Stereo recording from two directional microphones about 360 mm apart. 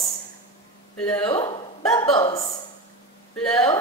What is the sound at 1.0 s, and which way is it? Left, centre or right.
A woman's voice, centre.